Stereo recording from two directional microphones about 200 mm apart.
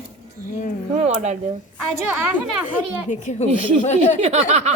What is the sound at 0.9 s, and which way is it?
Speech, 35° right (ahead or behind).